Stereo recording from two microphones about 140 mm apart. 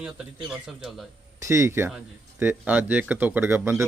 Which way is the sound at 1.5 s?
20° right (ahead or behind).